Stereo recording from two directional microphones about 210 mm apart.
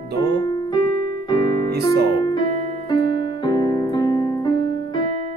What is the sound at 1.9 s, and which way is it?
Speech, 50° right (ahead or behind).